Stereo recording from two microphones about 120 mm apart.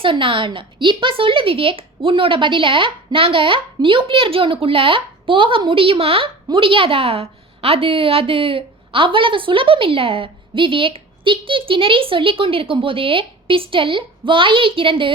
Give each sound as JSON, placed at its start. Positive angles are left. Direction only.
{"t": 0.0, "sound": "a woman's voice", "side_deg": -45}